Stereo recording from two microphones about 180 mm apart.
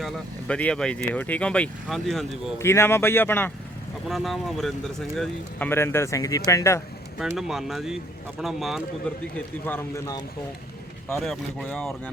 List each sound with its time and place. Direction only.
0.0 s speech: 5° left (ahead or behind)
2.6 s speech: 15° left (ahead or behind)
4.1 s speech: centre (ahead or behind); by 6.8 s 15° left (ahead or behind)
7.2 s speech: centre (ahead or behind); by 10.2 s 20° left (ahead or behind)
11.1 s speech: centre (ahead or behind)